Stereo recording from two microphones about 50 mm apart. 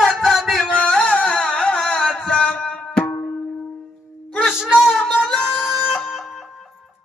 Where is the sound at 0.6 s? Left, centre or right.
Centre.